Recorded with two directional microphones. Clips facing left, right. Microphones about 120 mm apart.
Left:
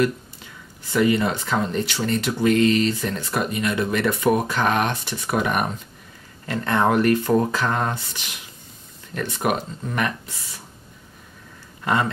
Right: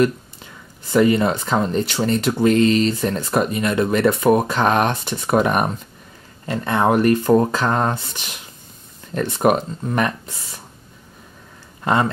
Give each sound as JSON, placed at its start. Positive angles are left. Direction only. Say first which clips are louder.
{"t": 0.9, "sound": "speech", "louder": "right 4 dB", "side_deg": -35}
{"t": 11.8, "sound": "speech", "louder": "right 3 dB", "side_deg": -30}